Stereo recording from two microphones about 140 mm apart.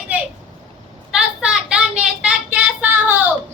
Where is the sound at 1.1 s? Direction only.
5° right (ahead or behind).